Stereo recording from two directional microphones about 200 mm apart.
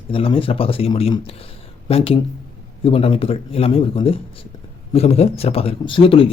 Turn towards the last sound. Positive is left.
turn(degrees=25)  # may be behind; listen again after turning